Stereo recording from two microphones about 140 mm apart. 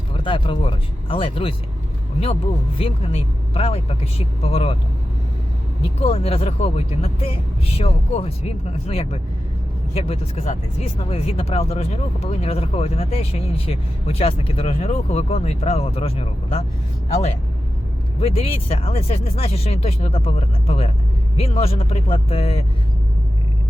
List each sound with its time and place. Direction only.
0.1 s speech: 40° left (ahead or behind)
6.0 s speech: 45° left (ahead or behind)
18.2 s speech: 45° left (ahead or behind)